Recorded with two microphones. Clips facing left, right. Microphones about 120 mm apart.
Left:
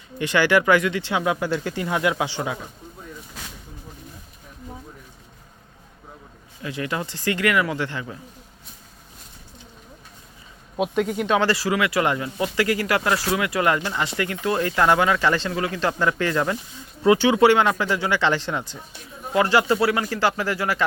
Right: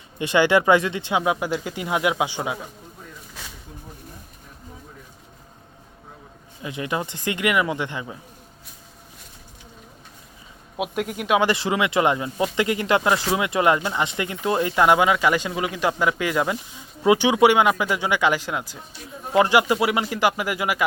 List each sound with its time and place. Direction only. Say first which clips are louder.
0.2 s speech: right 1 dB; 20° right (ahead or behind)
6.6 s speech: right 1 dB; 20° right (ahead or behind)
10.8 s speech: left 4 dB; 5° right (ahead or behind)
19.3 s speech: right 1 dB; 15° right (ahead or behind)